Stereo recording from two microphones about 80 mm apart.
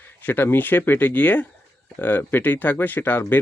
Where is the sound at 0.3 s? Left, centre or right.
Left.